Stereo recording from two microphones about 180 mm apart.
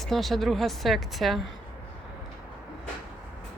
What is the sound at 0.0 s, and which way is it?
Speech, centre (ahead or behind).